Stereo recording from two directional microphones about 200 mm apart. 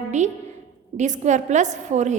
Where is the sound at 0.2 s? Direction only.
35° right (ahead or behind).